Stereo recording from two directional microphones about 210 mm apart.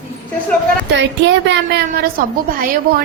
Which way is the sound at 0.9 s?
60° right (ahead or behind).